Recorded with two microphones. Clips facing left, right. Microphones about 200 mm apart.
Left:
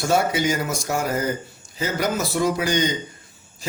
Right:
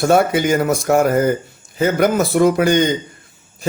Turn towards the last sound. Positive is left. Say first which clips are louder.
# right 9 dB
turn(degrees=-60)  # may be behind; listen again after turning